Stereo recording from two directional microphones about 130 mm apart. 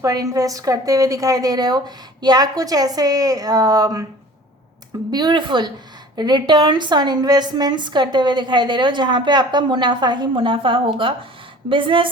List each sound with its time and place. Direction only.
0.0 s a woman's voice: 25° right (ahead or behind)
5.1 s a woman's voice: 35° right (ahead or behind)